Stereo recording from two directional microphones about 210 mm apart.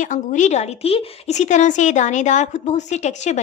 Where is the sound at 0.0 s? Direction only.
35° left (ahead or behind).